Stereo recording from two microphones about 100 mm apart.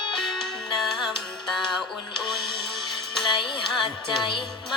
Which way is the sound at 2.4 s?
50° left (ahead or behind).